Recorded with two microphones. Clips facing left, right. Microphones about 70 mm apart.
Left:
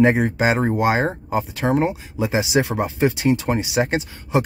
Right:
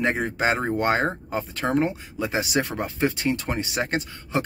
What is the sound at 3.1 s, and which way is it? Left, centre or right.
Speech, left.